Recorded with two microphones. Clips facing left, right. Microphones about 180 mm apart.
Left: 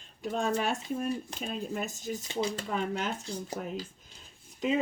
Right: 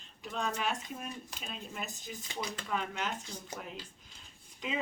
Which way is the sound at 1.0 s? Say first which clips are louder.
Left 11 dB; 30° left (ahead or behind).